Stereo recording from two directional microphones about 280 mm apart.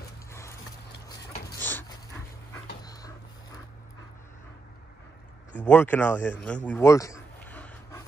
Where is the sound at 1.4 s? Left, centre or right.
Centre.